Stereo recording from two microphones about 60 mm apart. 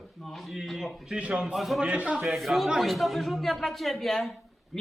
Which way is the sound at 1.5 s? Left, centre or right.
Centre.